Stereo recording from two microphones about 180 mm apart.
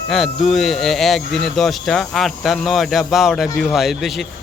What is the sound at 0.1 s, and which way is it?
Speech, centre (ahead or behind).